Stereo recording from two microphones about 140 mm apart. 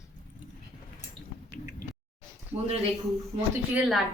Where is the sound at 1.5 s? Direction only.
90° left.